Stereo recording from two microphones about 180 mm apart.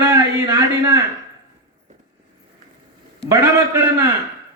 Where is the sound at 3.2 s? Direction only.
15° right (ahead or behind).